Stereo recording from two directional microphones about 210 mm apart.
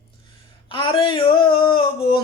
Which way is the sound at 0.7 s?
25° left (ahead or behind).